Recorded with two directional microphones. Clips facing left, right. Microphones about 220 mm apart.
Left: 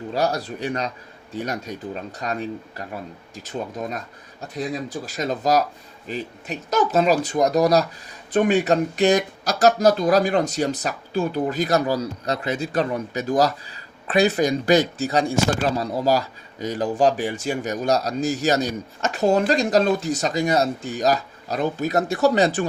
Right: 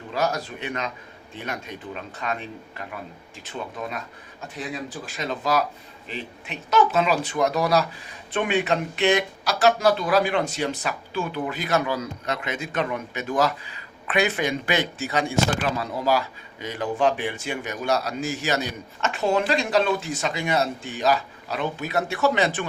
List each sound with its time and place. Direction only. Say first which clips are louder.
0.1 s speech: left 2 dB; 35° left (ahead or behind)